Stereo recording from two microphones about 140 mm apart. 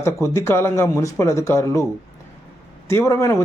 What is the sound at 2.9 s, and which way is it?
Speech, 20° left (ahead or behind).